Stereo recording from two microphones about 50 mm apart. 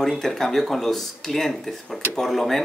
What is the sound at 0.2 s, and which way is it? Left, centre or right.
Speech, centre.